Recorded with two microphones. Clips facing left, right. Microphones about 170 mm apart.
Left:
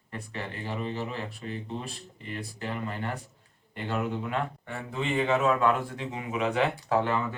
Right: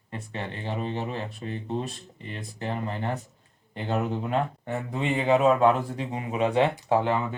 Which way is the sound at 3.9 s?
40° right (ahead or behind).